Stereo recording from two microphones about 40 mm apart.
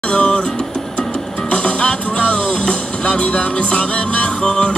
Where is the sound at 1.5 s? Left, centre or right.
Left.